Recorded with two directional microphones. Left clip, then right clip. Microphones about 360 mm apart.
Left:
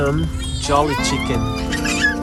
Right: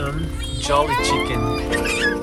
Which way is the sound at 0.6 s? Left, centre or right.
Centre.